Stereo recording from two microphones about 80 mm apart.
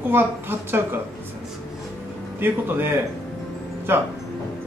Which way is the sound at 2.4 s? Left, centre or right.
Right.